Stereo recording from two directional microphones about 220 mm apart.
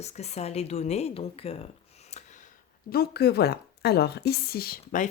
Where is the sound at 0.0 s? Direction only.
30° left (ahead or behind).